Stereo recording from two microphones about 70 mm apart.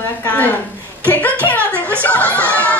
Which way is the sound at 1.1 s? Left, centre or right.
Left.